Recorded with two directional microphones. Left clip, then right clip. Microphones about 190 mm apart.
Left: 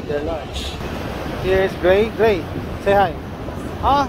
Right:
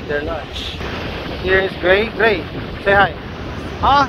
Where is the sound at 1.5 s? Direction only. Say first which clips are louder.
Right 1 dB; 20° left (ahead or behind).